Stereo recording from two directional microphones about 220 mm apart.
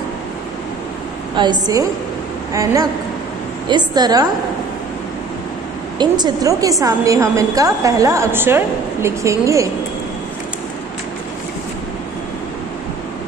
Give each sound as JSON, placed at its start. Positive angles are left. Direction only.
{"t": 1.3, "sound": "a woman's voice", "side_deg": -20}
{"t": 5.9, "sound": "a woman's voice", "side_deg": -20}